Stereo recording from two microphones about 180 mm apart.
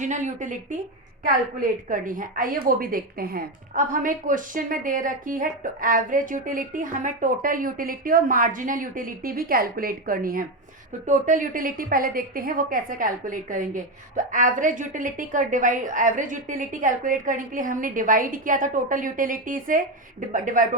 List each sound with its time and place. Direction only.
0.0 s a woman's voice: 40° right (ahead or behind)